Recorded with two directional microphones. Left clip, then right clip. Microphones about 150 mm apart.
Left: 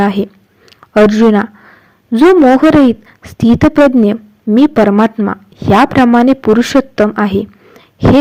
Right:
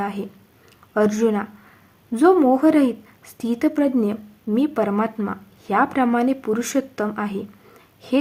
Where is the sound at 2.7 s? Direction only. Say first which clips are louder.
Left 10 dB; 35° left (ahead or behind).